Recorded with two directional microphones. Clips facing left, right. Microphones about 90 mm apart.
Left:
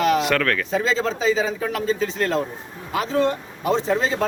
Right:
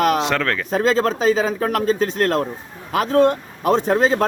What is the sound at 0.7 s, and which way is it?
Speech, 50° right (ahead or behind).